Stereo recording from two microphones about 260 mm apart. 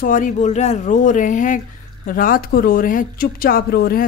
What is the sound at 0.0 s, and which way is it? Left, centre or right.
Speech, left.